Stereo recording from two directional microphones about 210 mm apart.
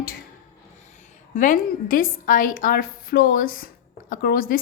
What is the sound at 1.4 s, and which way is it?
A woman's voice, 40° left (ahead or behind).